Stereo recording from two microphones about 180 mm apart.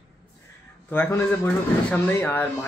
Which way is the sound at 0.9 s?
10° left (ahead or behind).